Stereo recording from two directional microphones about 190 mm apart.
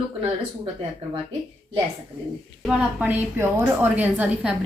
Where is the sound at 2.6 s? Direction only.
5° right (ahead or behind).